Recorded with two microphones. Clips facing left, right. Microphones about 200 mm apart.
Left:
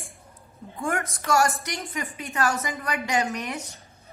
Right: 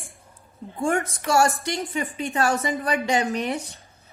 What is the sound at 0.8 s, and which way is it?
A woman's voice, 30° right (ahead or behind).